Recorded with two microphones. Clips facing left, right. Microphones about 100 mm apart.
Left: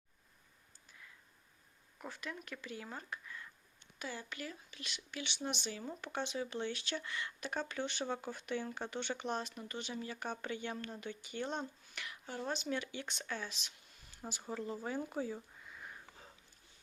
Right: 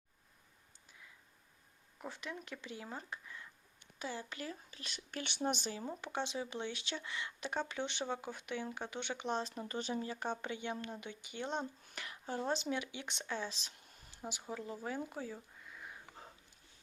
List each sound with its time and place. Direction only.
2.0 s speech: 20° right (ahead or behind); by 5.7 s 40° right (ahead or behind)
6.0 s speech: 20° right (ahead or behind)
9.4 s speech: 35° right (ahead or behind); by 11.6 s 15° right (ahead or behind)
11.9 s speech: 30° right (ahead or behind)
13.5 s a sound: 35° right (ahead or behind)
14.2 s speech: 15° right (ahead or behind)
14.5 s speech: centre (ahead or behind)